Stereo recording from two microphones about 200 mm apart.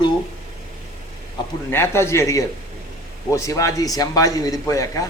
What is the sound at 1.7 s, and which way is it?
A man's voice, 10° left (ahead or behind).